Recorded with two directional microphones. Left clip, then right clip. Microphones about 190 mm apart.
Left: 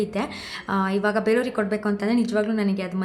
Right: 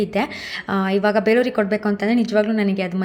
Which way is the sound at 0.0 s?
20° right (ahead or behind).